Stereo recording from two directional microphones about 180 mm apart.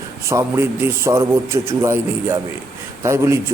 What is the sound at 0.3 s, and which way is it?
Speech, 15° right (ahead or behind).